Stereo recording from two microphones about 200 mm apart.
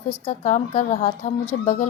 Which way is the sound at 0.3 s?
35° left (ahead or behind).